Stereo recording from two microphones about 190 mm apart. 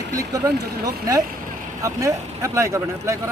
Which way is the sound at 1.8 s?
15° right (ahead or behind).